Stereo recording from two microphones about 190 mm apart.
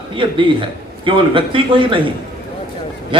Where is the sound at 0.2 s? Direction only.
25° right (ahead or behind).